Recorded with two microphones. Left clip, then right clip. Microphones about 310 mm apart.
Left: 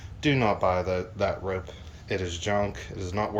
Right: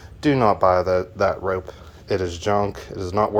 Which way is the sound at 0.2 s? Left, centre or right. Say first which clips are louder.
Right 7 dB; centre.